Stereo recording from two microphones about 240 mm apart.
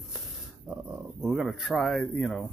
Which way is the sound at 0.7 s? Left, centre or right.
Centre.